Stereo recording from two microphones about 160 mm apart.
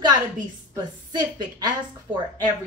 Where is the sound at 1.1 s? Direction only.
25° right (ahead or behind).